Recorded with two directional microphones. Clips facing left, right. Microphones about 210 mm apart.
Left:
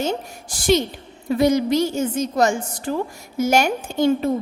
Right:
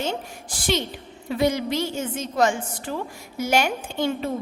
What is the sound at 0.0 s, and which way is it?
A woman's voice, 45° left (ahead or behind).